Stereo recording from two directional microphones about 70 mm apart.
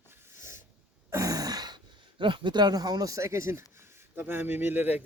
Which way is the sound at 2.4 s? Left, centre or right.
Right.